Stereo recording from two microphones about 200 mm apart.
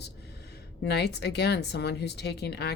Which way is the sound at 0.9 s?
55° left (ahead or behind).